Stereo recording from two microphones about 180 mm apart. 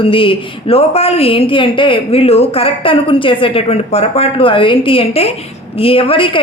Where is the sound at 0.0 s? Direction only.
30° left (ahead or behind).